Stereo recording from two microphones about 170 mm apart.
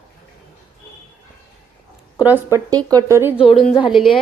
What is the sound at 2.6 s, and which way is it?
Speech, 20° right (ahead or behind).